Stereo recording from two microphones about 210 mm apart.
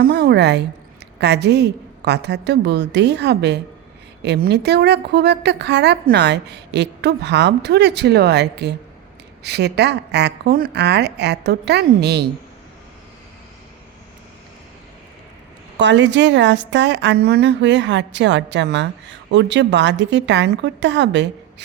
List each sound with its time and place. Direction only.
0.0 s a sound: 45° right (ahead or behind)
1.2 s a woman's voice: 50° right (ahead or behind)
15.8 s a woman's voice: 60° right (ahead or behind)